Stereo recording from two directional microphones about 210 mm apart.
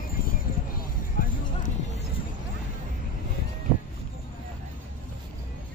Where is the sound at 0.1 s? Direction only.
45° left (ahead or behind).